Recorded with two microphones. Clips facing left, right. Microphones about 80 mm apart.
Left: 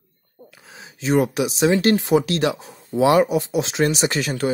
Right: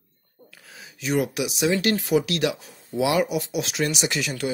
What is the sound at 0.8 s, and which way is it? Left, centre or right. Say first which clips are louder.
Speech: left 5 dB; left.